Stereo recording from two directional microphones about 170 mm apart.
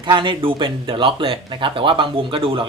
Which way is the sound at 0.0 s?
25° right (ahead or behind).